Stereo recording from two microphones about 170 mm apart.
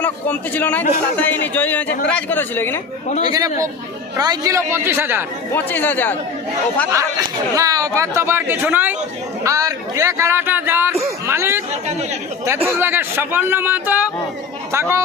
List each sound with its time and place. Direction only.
0.0 s a man's voice: 10° left (ahead or behind)
3.2 s speech: 25° right (ahead or behind)
5.5 s a man's voice: 10° left (ahead or behind)
6.9 s speech: 15° right (ahead or behind)
11.3 s chatter: 15° right (ahead or behind)
12.6 s speech: 15° right (ahead or behind)